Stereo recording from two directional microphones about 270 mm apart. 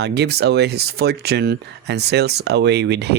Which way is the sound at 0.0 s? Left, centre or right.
Right.